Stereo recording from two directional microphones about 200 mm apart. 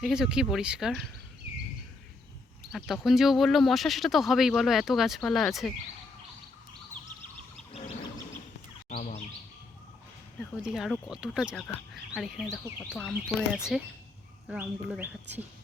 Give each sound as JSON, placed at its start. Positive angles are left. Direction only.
{"t": 0.0, "sound": "speech", "side_deg": -5}
{"t": 2.7, "sound": "speech", "side_deg": 0}
{"t": 8.9, "sound": "bird", "side_deg": 40}
{"t": 10.6, "sound": "speech", "side_deg": -5}